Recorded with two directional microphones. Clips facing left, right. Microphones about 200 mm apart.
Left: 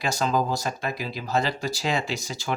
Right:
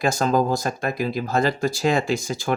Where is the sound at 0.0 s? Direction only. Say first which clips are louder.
Right 5 dB; 50° right (ahead or behind).